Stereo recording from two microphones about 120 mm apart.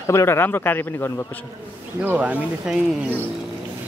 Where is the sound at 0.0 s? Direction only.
25° left (ahead or behind).